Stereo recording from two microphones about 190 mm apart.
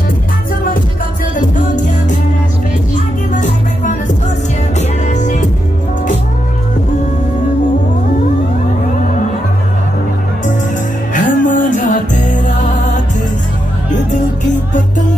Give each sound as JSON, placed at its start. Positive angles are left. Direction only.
{"t": 1.3, "sound": "music", "side_deg": 40}
{"t": 11.1, "sound": "music", "side_deg": 45}